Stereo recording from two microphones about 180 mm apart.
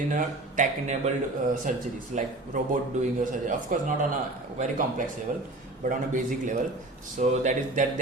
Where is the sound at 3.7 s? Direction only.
45° right (ahead or behind).